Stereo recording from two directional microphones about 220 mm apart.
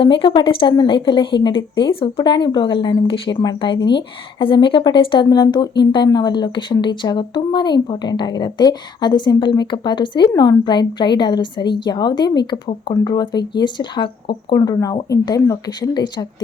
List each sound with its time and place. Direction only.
0.0 s a woman's voice: 25° left (ahead or behind)